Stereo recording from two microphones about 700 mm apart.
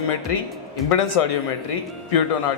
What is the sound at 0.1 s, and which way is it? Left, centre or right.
A man's voice, left.